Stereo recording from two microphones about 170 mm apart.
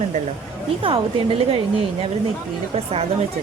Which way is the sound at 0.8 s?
30° right (ahead or behind).